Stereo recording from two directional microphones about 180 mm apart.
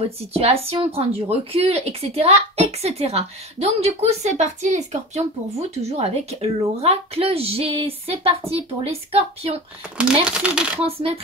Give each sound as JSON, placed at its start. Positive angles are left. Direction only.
{"t": 0.3, "sound": "a woman's voice", "side_deg": -35}
{"t": 9.9, "sound": "speech", "side_deg": -5}
{"t": 10.8, "sound": "a woman's voice", "side_deg": -30}